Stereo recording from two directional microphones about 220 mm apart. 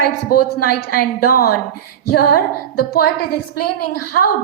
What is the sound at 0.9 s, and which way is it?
A woman's voice, 40° left (ahead or behind).